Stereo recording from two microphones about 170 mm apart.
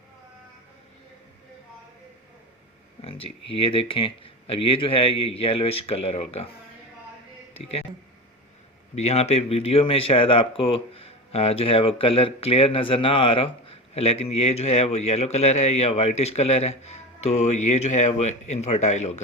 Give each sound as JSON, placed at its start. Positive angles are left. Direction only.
{"t": 3.0, "sound": "speech", "side_deg": 35}
{"t": 9.0, "sound": "speech", "side_deg": 40}